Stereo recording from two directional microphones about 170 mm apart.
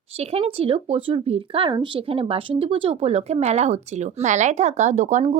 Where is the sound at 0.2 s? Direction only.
35° right (ahead or behind).